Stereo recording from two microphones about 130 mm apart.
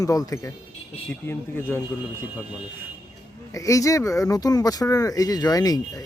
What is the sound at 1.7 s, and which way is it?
Speech, 15° left (ahead or behind).